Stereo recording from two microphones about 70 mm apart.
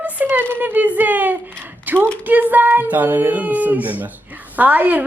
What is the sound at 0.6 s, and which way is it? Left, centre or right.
Speech, right.